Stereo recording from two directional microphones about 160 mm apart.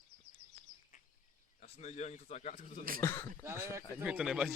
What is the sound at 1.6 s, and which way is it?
Speech, 45° left (ahead or behind).